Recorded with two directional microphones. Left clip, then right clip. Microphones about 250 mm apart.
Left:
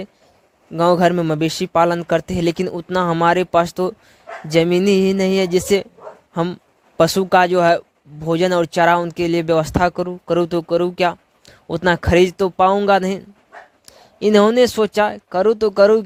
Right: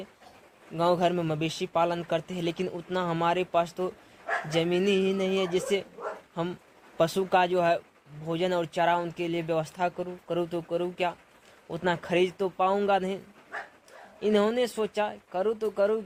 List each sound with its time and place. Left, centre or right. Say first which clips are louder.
0.8 s speech: left 10 dB; left